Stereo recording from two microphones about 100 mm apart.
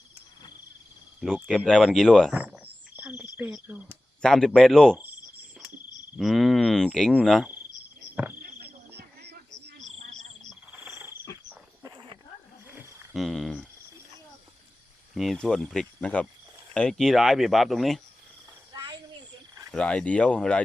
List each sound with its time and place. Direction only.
1.5 s speech: 5° left (ahead or behind)
2.3 s frog: 15° right (ahead or behind)
4.2 s speech: 5° left (ahead or behind)
6.1 s speech: centre (ahead or behind)
8.1 s cricket: 15° right (ahead or behind)
10.7 s frog: 20° right (ahead or behind)
11.8 s a sound: 40° right (ahead or behind)
12.6 s a sound: 25° right (ahead or behind)
13.1 s speech: centre (ahead or behind)
15.1 s speech: centre (ahead or behind)
18.7 s a sound: 45° right (ahead or behind)
19.7 s speech: 10° left (ahead or behind)